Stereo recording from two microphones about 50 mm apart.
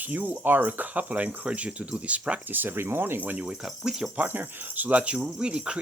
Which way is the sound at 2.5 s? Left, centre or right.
Right.